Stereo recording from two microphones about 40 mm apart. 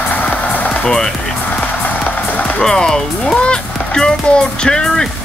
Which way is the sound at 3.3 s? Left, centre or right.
Left.